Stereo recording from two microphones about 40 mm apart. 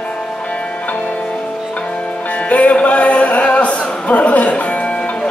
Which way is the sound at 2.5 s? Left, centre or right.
Left.